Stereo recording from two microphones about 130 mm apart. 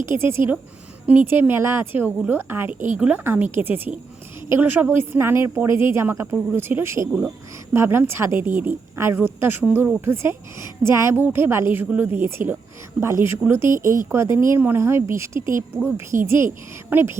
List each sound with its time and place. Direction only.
0.2 s a woman's voice: 20° right (ahead or behind)